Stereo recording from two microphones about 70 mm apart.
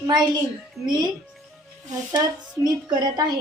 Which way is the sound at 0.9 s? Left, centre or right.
Right.